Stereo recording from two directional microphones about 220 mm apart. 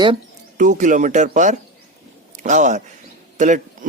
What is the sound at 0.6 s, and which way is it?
Speech, 35° right (ahead or behind).